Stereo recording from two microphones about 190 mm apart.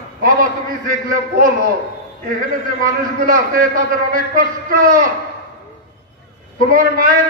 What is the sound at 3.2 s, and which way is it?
Speech, 50° right (ahead or behind).